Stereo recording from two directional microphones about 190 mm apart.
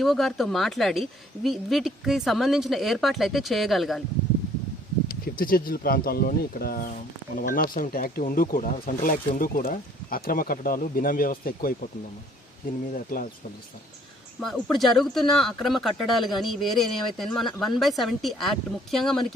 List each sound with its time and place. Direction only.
0.0 s speech: centre (ahead or behind)
5.0 s speech: 50° left (ahead or behind)
12.9 s speech: 50° left (ahead or behind)
14.3 s speech: centre (ahead or behind)